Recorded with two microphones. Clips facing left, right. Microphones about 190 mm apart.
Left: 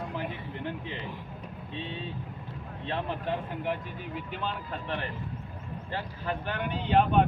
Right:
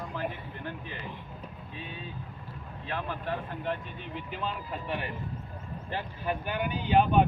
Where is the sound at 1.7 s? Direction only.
30° left (ahead or behind).